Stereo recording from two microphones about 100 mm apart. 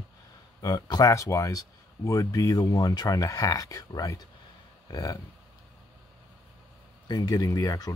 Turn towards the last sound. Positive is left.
turn(degrees=40)  # may be behind; listen again after turning